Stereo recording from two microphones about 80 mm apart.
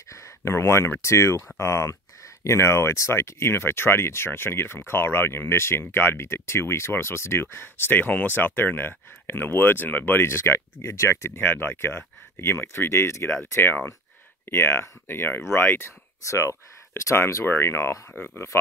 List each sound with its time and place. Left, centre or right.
0.1 s speech: left